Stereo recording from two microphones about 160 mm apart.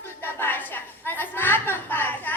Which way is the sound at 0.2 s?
15° left (ahead or behind).